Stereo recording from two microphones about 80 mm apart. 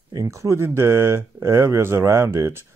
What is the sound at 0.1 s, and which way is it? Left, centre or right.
Speech, right.